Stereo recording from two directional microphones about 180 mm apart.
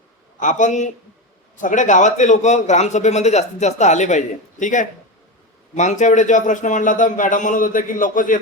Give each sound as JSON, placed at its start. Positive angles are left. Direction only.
{"t": 0.3, "sound": "a man's voice", "side_deg": 45}